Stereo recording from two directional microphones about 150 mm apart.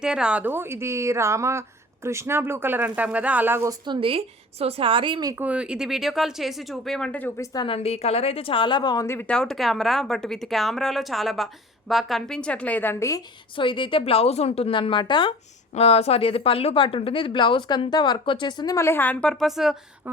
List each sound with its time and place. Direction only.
0.0 s speech: 5° right (ahead or behind)
3.8 s a woman's voice: 35° right (ahead or behind)
5.3 s speech: 10° right (ahead or behind); by 7.8 s 30° left (ahead or behind)
7.8 s speech: 45° left (ahead or behind); by 13.2 s 20° left (ahead or behind)
13.6 s a woman's voice: 35° left (ahead or behind); by 19.7 s centre (ahead or behind)